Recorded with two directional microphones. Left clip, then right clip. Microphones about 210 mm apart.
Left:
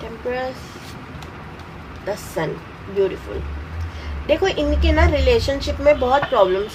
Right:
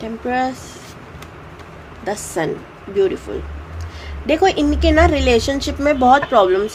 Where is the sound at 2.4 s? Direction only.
55° right (ahead or behind).